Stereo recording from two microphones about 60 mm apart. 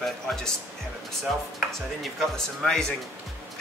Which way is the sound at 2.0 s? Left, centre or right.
Centre.